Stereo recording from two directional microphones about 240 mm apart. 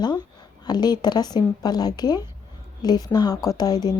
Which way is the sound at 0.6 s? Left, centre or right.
Centre.